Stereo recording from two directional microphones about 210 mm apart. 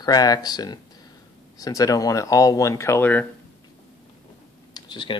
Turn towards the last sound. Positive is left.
turn(degrees=20)  # may be behind; listen again after turning